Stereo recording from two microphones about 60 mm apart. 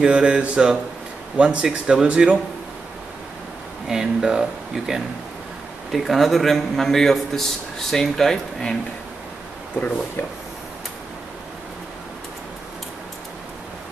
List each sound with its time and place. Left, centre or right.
0.0 s speech: centre
3.8 s a man's voice: centre